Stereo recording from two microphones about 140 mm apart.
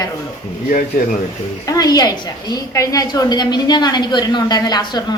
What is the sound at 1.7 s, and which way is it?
A woman's voice, 30° left (ahead or behind).